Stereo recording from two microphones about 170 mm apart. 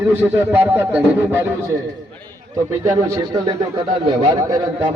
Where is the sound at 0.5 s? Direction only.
15° right (ahead or behind).